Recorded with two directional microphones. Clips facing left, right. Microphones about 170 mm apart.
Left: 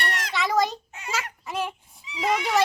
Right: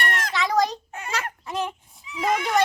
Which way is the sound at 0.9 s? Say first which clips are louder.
Right 3 dB; 55° right (ahead or behind).